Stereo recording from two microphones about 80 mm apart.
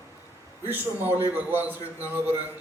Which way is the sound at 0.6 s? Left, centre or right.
Right.